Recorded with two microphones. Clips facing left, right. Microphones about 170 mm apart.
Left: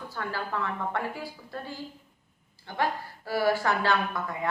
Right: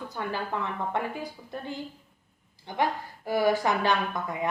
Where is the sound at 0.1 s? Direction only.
20° right (ahead or behind).